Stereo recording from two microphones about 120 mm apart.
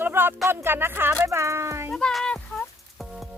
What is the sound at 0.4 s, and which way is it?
Speech, 20° right (ahead or behind).